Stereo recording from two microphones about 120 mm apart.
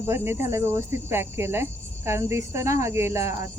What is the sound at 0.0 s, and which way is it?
Speech, 20° right (ahead or behind).